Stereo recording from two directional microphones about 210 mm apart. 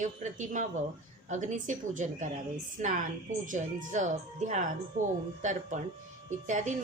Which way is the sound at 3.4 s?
35° right (ahead or behind).